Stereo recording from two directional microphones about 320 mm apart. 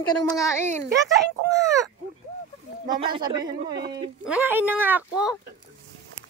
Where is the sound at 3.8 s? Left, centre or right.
Right.